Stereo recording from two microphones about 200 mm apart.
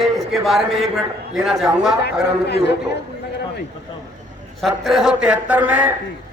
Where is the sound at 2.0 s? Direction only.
55° left (ahead or behind).